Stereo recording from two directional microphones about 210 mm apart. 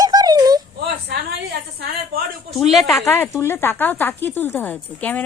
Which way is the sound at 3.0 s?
10° left (ahead or behind).